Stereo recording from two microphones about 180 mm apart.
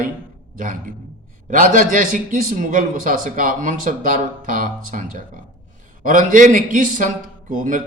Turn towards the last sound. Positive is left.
turn(degrees=-45)  # may be behind; listen again after turning